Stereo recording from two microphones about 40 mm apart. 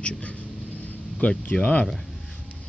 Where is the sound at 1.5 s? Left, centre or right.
Left.